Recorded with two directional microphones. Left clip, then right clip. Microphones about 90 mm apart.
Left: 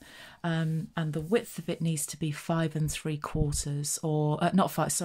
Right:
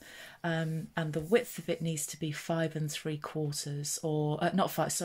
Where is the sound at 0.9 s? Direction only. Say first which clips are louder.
Right 1 dB; 30° left (ahead or behind).